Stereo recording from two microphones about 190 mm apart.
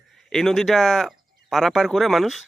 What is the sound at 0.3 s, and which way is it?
Speech, centre (ahead or behind).